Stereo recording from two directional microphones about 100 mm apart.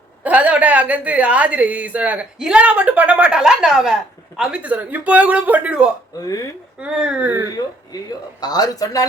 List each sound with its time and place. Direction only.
0.2 s a woman's voice: 15° right (ahead or behind)
6.1 s a man's voice: 35° left (ahead or behind)
6.7 s a woman's voice: 10° right (ahead or behind)
8.4 s a man's voice: 40° left (ahead or behind)